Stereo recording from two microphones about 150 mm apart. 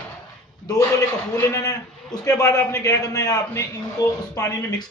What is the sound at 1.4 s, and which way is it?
A man's voice, 20° left (ahead or behind).